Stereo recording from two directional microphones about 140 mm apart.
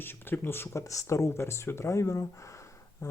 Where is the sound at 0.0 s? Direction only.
15° left (ahead or behind).